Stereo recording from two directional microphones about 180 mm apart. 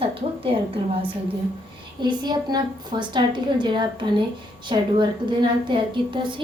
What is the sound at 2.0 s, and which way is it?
A woman's voice, 25° right (ahead or behind).